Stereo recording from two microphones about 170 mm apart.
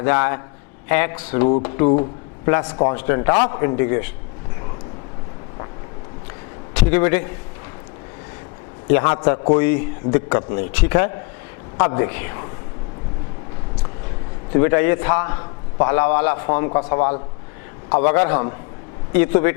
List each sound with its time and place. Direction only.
0.0 s a man's voice: 15° left (ahead or behind)
2.9 s a man's voice: 15° left (ahead or behind)
6.7 s a man's voice: 15° left (ahead or behind)
9.0 s a man's voice: 25° left (ahead or behind)
9.6 s a man's voice: 15° left (ahead or behind)
14.5 s a man's voice: 20° left (ahead or behind)